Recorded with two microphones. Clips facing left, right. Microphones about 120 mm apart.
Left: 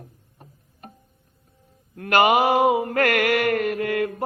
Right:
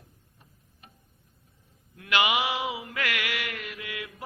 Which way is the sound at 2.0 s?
45° left (ahead or behind).